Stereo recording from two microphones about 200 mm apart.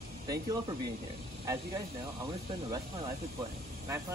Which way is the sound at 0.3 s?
20° right (ahead or behind).